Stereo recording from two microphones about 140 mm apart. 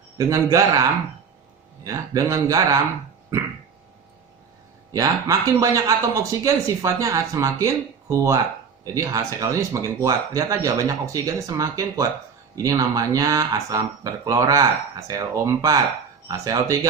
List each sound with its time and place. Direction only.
0.2 s speech: 20° right (ahead or behind)
4.9 s speech: 25° right (ahead or behind)